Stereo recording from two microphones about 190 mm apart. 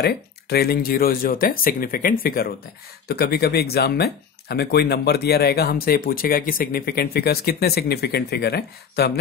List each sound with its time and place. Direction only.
0.0 s speech: 55° left (ahead or behind)